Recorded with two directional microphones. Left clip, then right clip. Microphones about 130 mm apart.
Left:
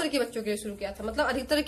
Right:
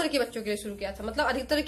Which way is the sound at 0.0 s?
10° left (ahead or behind).